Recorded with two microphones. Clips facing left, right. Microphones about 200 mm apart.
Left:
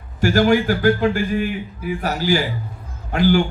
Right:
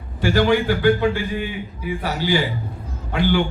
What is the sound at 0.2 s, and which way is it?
Speech, 45° left (ahead or behind).